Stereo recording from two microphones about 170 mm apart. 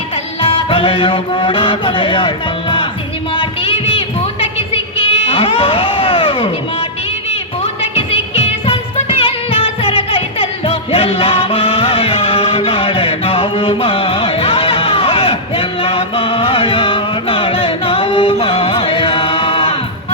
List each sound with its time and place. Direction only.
0.4 s music: 30° left (ahead or behind)
3.3 s a sound: 35° left (ahead or behind)
7.8 s music: 35° left (ahead or behind)